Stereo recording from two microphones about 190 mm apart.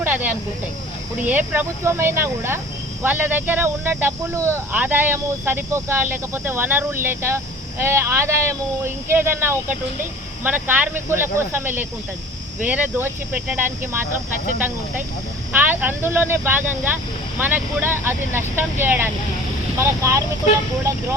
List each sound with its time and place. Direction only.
0.0 s a sound: 10° right (ahead or behind)
1.3 s speech: 10° right (ahead or behind)
15.5 s speech: 10° right (ahead or behind)